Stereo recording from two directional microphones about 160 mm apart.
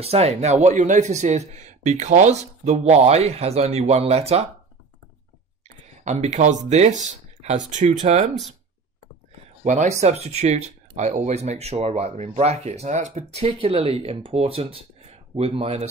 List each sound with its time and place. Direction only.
0.0 s speech: 40° right (ahead or behind)
6.0 s speech: 45° right (ahead or behind)
9.7 s speech: 45° right (ahead or behind)